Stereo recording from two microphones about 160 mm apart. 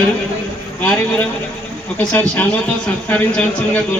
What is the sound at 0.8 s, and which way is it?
A man's voice, 10° left (ahead or behind).